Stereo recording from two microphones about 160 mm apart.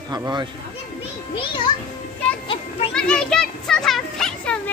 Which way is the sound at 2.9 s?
5° left (ahead or behind).